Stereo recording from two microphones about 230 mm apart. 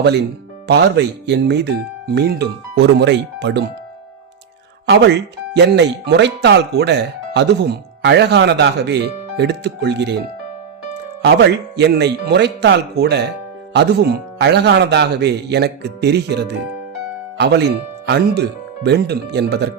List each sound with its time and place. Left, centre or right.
0.7 s speech: right
4.9 s speech: right
11.2 s speech: right